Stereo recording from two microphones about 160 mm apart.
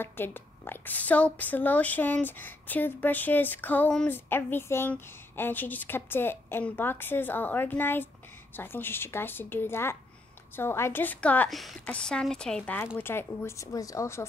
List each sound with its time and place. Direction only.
0.0 s a woman's voice: 15° left (ahead or behind)